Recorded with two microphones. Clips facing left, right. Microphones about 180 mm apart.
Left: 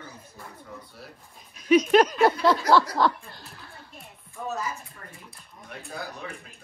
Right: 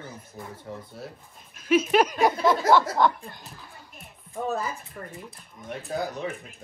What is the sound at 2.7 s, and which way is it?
Speech, 55° right (ahead or behind).